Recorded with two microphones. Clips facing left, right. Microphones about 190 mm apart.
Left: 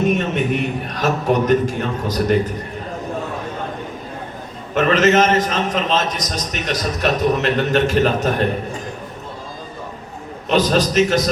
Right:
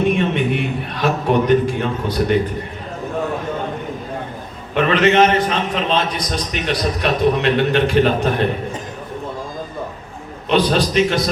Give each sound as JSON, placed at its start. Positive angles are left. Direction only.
{"t": 0.0, "sound": "a sound", "side_deg": 40}
{"t": 4.7, "sound": "a man's voice", "side_deg": 45}
{"t": 10.5, "sound": "a man's voice", "side_deg": 40}